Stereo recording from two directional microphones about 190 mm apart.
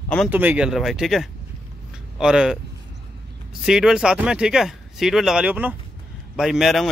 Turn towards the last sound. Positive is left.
turn(degrees=0)  # may be behind; listen again after turning